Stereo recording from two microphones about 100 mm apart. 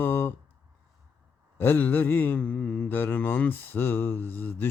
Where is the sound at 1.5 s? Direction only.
20° left (ahead or behind).